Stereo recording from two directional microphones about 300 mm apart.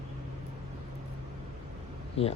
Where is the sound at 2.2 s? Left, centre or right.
Centre.